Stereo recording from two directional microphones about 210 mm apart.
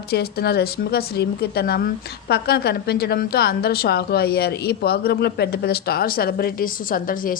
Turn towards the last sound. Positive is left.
turn(degrees=40)  # may be behind; listen again after turning